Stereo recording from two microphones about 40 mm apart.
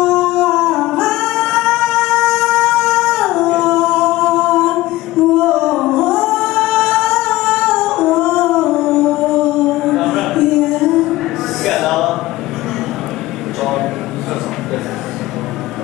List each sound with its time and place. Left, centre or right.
0.0 s a sound: centre
1.3 s music: centre
3.2 s singing: centre
4.4 s a capella: centre
4.6 s singing: centre
8.4 s howl: centre
9.2 s music: centre
11.6 s a sound: centre
13.6 s a sound: centre